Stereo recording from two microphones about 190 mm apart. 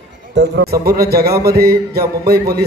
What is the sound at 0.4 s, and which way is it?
A man's voice, 60° right (ahead or behind).